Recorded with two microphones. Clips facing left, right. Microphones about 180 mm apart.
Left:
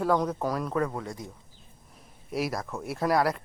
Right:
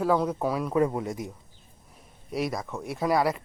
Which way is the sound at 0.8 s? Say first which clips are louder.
Right 5 dB; 20° right (ahead or behind).